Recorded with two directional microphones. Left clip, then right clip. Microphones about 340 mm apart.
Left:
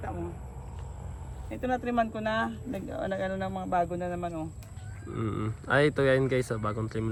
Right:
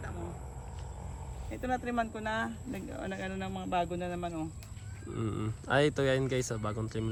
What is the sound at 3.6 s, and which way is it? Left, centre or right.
Speech, centre.